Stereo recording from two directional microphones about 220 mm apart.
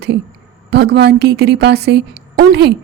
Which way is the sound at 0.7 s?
50° right (ahead or behind).